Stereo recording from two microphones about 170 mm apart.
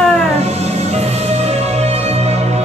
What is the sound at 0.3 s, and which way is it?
Music, 40° right (ahead or behind).